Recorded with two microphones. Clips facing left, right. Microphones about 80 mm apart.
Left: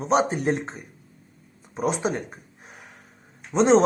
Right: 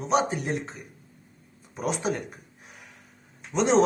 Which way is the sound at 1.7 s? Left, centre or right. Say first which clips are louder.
Left 3 dB; left.